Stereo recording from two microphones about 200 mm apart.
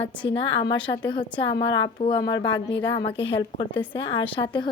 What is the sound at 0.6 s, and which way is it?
Speech, 25° left (ahead or behind).